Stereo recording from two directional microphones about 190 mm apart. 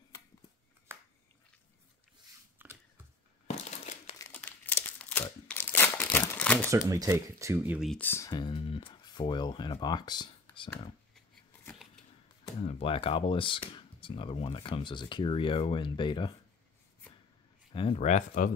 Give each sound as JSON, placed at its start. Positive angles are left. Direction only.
{"t": 0.9, "sound": "a sound", "side_deg": -15}
{"t": 2.6, "sound": "a sound", "side_deg": -10}
{"t": 3.4, "sound": "crushing", "side_deg": 35}
{"t": 4.2, "sound": "crumpling", "side_deg": 10}
{"t": 6.9, "sound": "speech", "side_deg": -15}
{"t": 7.9, "sound": "speech", "side_deg": 10}
{"t": 11.1, "sound": "shuffling cards", "side_deg": 0}
{"t": 12.6, "sound": "speech", "side_deg": 30}
{"t": 17.9, "sound": "speech", "side_deg": 40}